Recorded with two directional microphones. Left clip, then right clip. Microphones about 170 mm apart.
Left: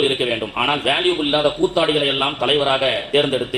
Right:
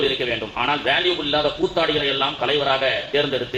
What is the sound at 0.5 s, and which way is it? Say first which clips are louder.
A man's voice: even; 35° left (ahead or behind).